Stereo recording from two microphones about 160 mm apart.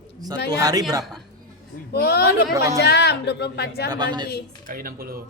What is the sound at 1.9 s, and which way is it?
Speech, 80° left.